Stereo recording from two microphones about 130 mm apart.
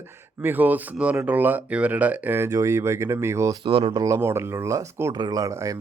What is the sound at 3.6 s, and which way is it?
Speech, 45° right (ahead or behind).